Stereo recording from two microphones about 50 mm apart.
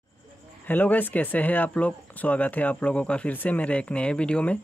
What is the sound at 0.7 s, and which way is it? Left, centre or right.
Speech, left.